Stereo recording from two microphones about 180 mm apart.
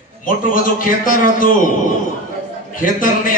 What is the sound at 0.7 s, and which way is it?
Speech, 50° left (ahead or behind).